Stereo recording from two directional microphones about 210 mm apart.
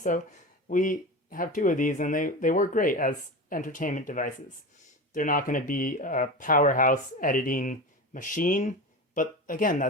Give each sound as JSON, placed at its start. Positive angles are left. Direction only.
{"t": 0.0, "sound": "speech", "side_deg": 40}